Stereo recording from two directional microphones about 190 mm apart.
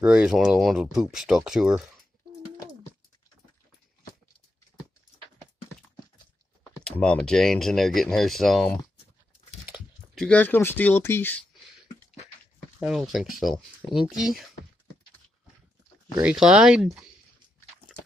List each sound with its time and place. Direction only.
0.0 s speech: 5° right (ahead or behind)
7.0 s speech: 5° left (ahead or behind)
12.7 s speech: centre (ahead or behind)
16.2 s speech: 5° right (ahead or behind)